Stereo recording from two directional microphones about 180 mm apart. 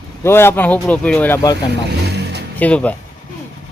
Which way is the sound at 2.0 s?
65° right (ahead or behind).